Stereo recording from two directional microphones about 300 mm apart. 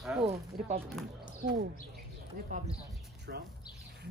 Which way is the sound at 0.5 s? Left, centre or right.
Right.